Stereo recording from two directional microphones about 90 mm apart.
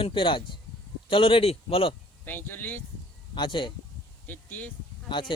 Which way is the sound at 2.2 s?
20° left (ahead or behind).